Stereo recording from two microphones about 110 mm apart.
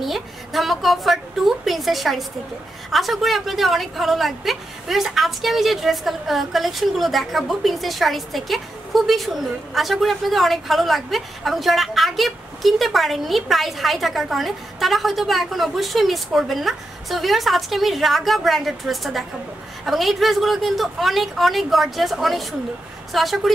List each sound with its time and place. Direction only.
0.0 s a woman's voice: centre (ahead or behind)